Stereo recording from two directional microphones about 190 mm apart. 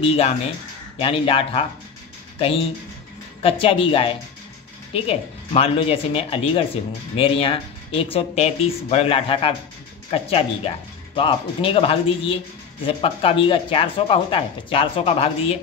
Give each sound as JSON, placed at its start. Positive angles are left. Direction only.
{"t": 0.0, "sound": "speech", "side_deg": 30}